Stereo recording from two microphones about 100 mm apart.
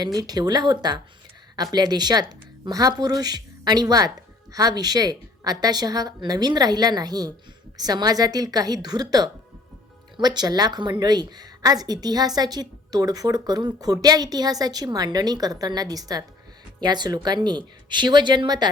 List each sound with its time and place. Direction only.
0.0 s speech: 40° right (ahead or behind)